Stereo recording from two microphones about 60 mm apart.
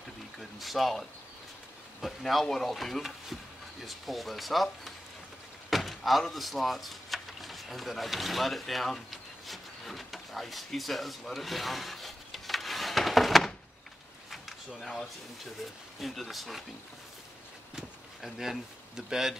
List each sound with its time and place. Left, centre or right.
0.4 s speech: centre
5.7 s door: centre
16.0 s speech: centre
17.7 s speech: centre